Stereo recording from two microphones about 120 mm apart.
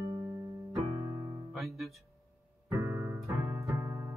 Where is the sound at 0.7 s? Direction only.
25° right (ahead or behind).